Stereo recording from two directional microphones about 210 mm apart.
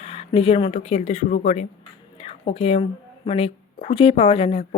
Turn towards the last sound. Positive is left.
turn(degrees=30)  # may be behind; listen again after turning